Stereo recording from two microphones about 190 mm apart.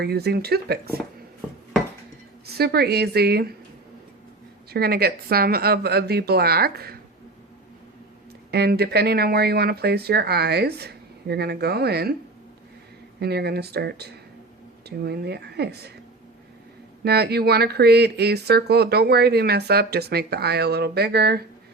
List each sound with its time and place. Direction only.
0.0 s speech: 55° right (ahead or behind)
2.5 s speech: 55° right (ahead or behind)
4.7 s speech: 55° right (ahead or behind)
8.4 s speech: 60° right (ahead or behind)
13.1 s speech: 60° right (ahead or behind)
17.0 s speech: 60° right (ahead or behind)